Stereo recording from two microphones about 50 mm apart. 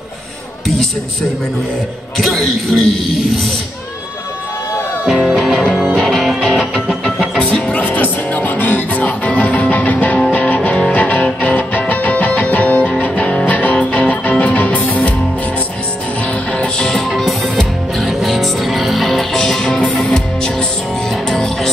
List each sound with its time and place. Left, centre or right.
2.1 s a man's voice: centre
5.1 s music: centre
7.3 s music: centre
16.5 s music: centre